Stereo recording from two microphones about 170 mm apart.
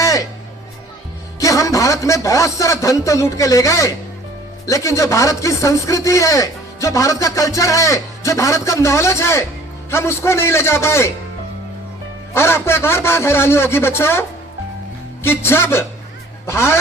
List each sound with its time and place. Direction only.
0.0 s music: 20° left (ahead or behind)
1.4 s a man's voice: 20° left (ahead or behind)
12.3 s speech: 15° left (ahead or behind)